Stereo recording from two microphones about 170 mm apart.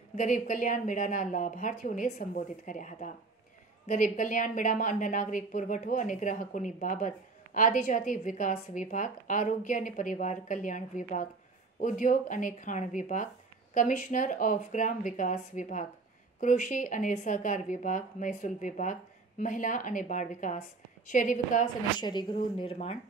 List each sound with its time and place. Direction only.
0.1 s a woman's voice: 50° left (ahead or behind)
22.0 s speech: 30° left (ahead or behind)